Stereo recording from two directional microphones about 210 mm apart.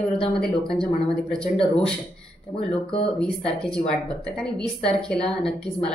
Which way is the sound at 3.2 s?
5° left (ahead or behind).